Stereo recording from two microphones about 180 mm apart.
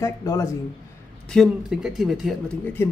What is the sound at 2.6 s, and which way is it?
Speech, 10° left (ahead or behind).